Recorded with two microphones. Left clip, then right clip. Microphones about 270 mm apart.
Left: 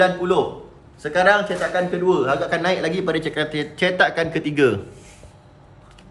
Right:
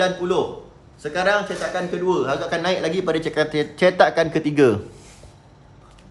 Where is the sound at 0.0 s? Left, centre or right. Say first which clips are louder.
Left 3 dB; centre; by 4.8 s right.